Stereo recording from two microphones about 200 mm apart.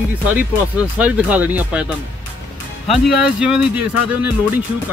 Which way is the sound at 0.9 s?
5° right (ahead or behind).